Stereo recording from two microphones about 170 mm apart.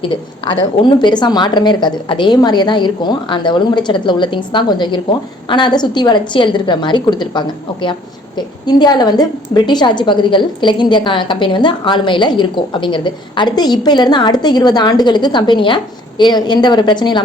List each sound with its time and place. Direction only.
0.0 s a woman's voice: 30° left (ahead or behind)